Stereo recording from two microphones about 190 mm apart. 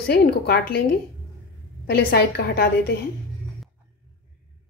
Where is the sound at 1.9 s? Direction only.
55° left (ahead or behind).